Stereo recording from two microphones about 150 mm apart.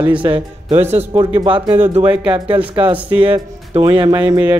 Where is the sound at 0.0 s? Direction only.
35° right (ahead or behind).